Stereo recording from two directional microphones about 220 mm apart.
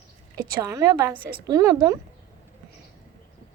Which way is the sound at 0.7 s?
20° right (ahead or behind).